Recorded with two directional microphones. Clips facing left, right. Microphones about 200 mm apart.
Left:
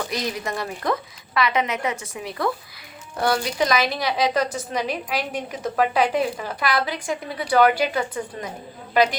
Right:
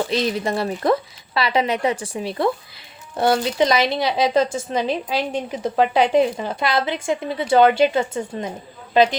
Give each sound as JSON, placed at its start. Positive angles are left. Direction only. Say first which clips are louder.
{"t": 0.0, "sound": "a woman's voice", "louder": "right 6 dB", "side_deg": -25}